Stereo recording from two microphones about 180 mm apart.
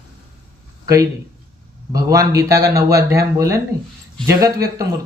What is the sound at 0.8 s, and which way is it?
Speech, 15° right (ahead or behind).